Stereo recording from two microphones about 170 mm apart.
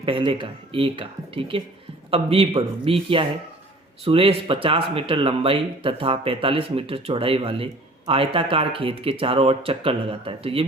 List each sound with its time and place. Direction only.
0.0 s speech: 30° right (ahead or behind)